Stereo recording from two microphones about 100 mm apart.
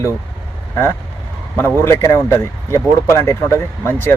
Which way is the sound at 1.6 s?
20° left (ahead or behind).